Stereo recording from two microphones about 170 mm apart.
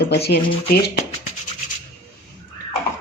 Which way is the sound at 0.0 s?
75° left (ahead or behind).